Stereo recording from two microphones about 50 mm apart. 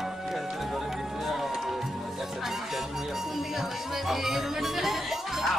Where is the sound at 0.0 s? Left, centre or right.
Centre.